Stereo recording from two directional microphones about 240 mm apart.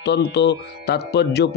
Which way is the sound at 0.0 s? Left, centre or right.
Left.